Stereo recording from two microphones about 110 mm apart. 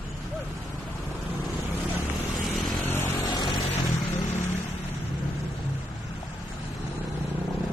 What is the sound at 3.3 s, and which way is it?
Vehicle, 40° left (ahead or behind).